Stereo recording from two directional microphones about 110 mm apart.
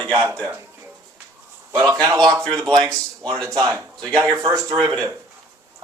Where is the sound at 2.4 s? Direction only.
10° left (ahead or behind).